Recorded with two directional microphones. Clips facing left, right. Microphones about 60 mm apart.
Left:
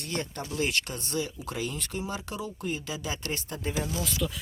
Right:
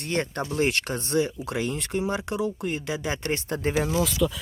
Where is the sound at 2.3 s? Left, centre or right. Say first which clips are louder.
Right 6 dB; right.